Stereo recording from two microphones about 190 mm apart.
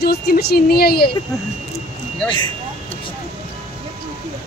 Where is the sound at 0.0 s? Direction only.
55° left (ahead or behind).